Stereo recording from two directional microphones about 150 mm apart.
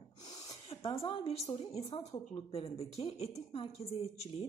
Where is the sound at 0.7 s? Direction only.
40° left (ahead or behind).